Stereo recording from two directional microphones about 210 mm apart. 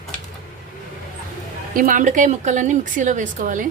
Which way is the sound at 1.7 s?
40° right (ahead or behind).